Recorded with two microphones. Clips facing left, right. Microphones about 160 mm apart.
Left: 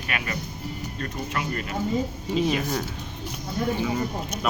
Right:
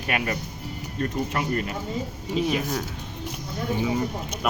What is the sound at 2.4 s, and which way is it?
Speech, 5° right (ahead or behind).